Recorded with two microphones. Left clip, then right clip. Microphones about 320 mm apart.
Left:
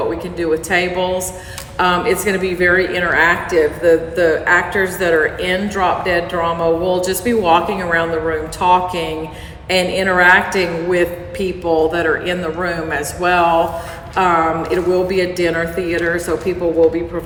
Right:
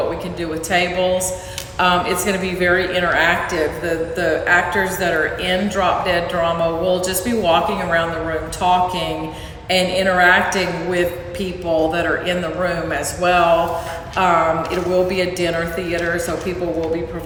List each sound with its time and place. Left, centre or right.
0.3 s speech: centre